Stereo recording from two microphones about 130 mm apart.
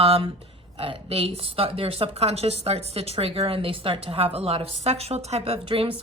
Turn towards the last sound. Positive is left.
turn(degrees=-50)  # may be behind; listen again after turning